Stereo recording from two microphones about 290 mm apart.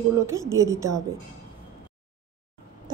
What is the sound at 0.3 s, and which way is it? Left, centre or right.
Speech, centre.